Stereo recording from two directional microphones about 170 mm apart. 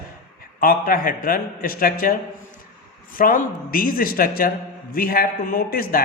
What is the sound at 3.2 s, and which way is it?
A man's voice, 55° left (ahead or behind).